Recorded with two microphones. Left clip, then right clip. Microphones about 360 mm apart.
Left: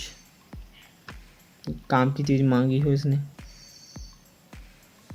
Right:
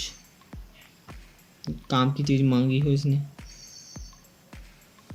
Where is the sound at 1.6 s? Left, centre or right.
Centre.